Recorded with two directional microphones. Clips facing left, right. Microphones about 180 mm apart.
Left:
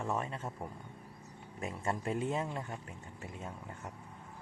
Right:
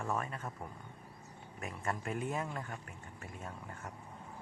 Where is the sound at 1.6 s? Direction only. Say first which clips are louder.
Left 3 dB; 25° left (ahead or behind).